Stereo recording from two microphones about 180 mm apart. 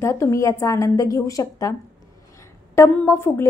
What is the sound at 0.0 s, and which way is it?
Speech, 15° left (ahead or behind).